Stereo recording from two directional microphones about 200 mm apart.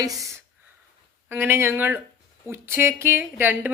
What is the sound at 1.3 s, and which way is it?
Speech, 10° right (ahead or behind).